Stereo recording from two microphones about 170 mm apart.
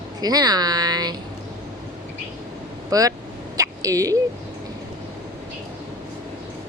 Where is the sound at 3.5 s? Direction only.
20° right (ahead or behind).